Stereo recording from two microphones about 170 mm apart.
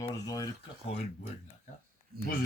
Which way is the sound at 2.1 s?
65° right (ahead or behind).